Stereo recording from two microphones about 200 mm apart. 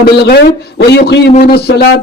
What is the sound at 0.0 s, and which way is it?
A man's voice, 55° left (ahead or behind).